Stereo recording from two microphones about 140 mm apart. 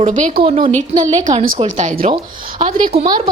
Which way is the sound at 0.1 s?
65° right (ahead or behind).